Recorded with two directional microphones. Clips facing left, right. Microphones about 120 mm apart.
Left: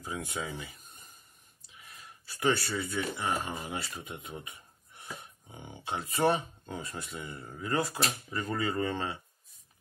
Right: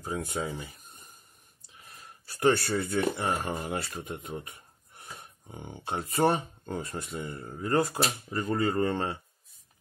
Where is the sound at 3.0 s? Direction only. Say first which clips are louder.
Right 2 dB; 50° right (ahead or behind).